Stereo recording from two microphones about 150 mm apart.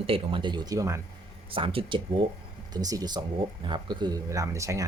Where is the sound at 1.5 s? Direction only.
35° right (ahead or behind).